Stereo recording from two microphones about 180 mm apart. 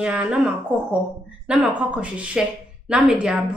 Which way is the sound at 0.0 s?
5° right (ahead or behind).